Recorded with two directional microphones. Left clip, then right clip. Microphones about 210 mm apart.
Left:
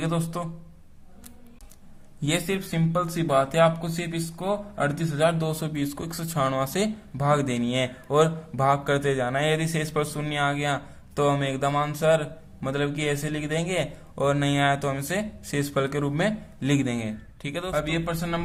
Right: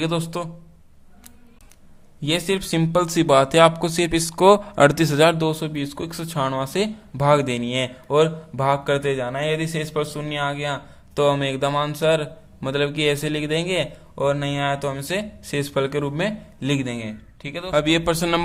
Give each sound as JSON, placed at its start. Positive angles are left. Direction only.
{"t": 0.0, "sound": "speech", "side_deg": -15}
{"t": 2.2, "sound": "speech", "side_deg": -10}
{"t": 2.6, "sound": "speech", "side_deg": -25}
{"t": 5.5, "sound": "speech", "side_deg": -10}
{"t": 17.7, "sound": "speech", "side_deg": -25}